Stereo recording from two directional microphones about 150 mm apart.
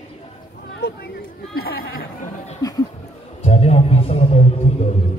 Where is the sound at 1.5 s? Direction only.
85° left.